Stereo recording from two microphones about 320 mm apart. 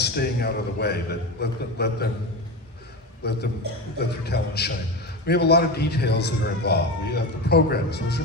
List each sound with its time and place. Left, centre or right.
0.0 s a man's voice: left
3.2 s a man's voice: left